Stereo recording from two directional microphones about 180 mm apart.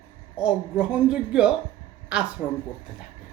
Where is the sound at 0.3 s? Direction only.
5° right (ahead or behind).